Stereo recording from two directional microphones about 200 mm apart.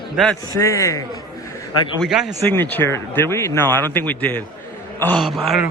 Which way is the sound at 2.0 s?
Centre (ahead or behind).